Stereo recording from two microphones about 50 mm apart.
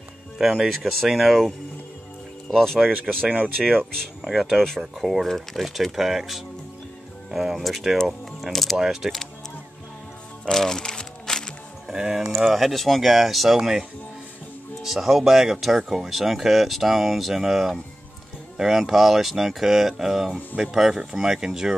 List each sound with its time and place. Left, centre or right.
0.4 s speech: centre
2.4 s speech: centre
8.3 s music: centre
8.7 s speech: centre
10.4 s music: centre
11.9 s speech: centre